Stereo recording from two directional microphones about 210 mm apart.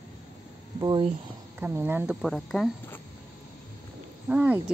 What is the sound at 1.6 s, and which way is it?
Speech, 10° right (ahead or behind).